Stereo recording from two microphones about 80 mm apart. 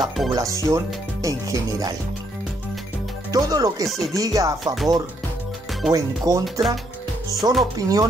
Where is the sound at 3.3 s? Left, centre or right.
Right.